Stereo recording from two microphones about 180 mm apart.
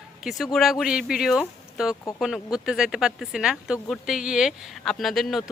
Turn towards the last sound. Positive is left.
turn(degrees=0)  # may be behind; listen again after turning